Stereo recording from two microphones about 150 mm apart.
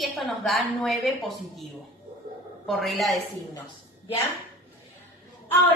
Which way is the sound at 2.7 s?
Centre (ahead or behind).